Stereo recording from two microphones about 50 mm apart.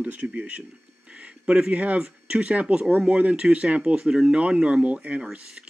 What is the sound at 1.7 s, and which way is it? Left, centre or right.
Speech, right.